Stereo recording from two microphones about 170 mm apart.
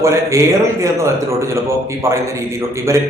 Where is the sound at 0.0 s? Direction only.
15° right (ahead or behind).